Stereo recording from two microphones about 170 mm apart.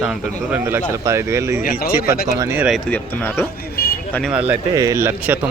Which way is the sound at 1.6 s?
60° left (ahead or behind).